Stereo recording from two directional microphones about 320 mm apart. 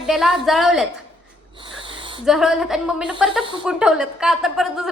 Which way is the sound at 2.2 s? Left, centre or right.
Centre.